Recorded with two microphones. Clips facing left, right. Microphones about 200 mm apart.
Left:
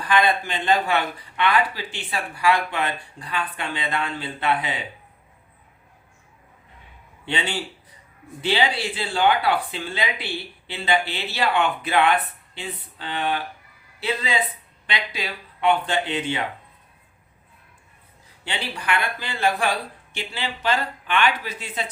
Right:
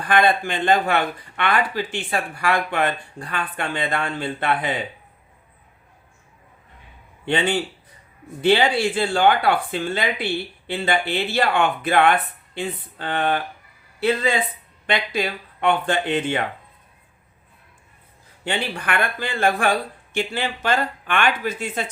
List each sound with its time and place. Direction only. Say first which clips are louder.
0.0 s speech: right 2 dB; 50° right (ahead or behind)
7.3 s speech: right 6 dB; 50° right (ahead or behind)
18.4 s speech: right 3 dB; 50° right (ahead or behind)